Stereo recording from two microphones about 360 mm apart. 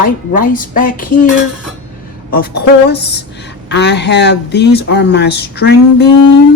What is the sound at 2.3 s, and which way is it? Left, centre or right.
Speech, left.